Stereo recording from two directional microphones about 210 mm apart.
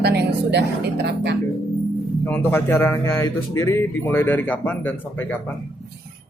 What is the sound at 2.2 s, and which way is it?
Speech, 10° left (ahead or behind).